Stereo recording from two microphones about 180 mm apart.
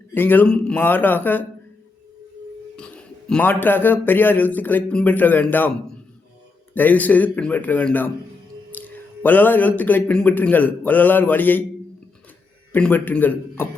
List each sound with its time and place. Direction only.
0.1 s speech: 10° left (ahead or behind)
2.7 s speech: 5° left (ahead or behind)
6.7 s speech: 10° left (ahead or behind)
12.7 s speech: 10° left (ahead or behind)